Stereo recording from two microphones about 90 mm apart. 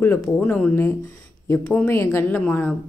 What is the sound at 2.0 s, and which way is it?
Speech, 30° left (ahead or behind).